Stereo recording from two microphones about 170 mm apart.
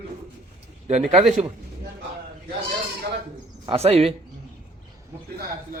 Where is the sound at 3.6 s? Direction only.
35° right (ahead or behind).